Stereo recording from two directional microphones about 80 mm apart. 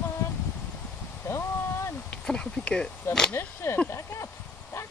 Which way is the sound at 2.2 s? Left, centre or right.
Centre.